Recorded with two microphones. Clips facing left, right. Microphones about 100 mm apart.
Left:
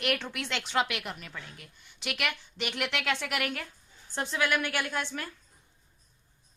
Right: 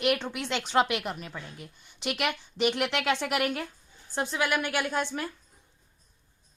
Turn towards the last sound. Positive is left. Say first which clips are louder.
# right 4 dB
turn(degrees=-20)  # may be behind; listen again after turning